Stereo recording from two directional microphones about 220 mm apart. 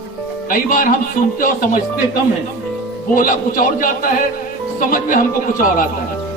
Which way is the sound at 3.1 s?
40° left (ahead or behind).